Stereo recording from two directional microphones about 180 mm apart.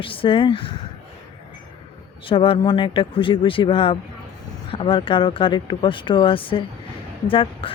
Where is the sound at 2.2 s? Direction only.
30° left (ahead or behind).